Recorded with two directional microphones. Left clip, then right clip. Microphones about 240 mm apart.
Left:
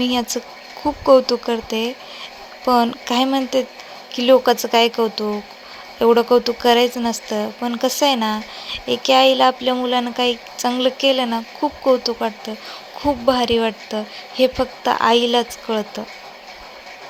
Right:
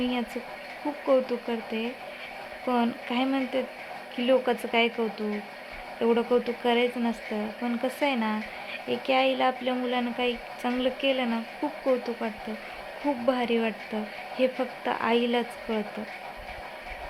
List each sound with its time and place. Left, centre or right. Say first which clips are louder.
0.0 s speech: left 10 dB; left